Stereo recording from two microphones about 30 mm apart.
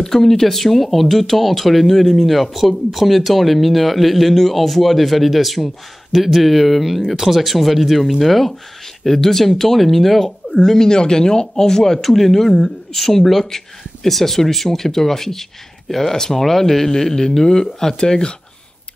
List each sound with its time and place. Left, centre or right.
0.0 s speech: centre
10.6 s speech: centre
12.0 s speech: centre